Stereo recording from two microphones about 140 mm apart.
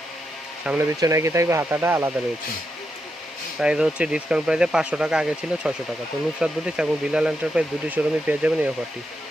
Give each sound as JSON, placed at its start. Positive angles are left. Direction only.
{"t": 0.6, "sound": "speech", "side_deg": -10}
{"t": 0.9, "sound": "speech", "side_deg": -25}
{"t": 3.6, "sound": "speech", "side_deg": -5}